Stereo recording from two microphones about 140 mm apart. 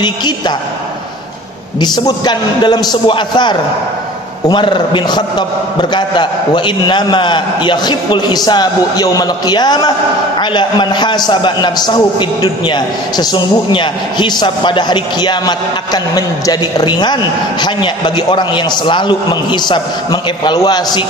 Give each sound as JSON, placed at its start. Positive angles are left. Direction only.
{"t": 0.0, "sound": "a man's voice", "side_deg": 35}
{"t": 1.8, "sound": "a man's voice", "side_deg": 30}